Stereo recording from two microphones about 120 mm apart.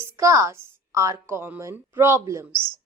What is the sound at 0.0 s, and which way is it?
Speech, 25° right (ahead or behind).